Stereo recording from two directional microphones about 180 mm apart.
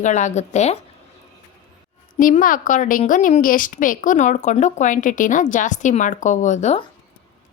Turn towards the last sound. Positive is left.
turn(degrees=40)  # may be behind; listen again after turning